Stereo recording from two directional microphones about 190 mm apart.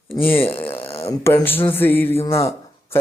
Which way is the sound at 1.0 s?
15° left (ahead or behind).